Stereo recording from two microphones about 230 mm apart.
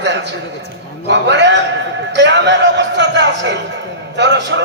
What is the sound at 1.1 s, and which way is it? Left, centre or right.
Speech, right.